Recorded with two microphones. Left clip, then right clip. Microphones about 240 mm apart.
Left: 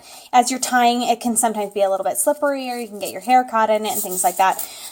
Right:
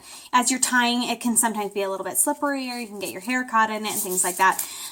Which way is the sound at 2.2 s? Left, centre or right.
Left.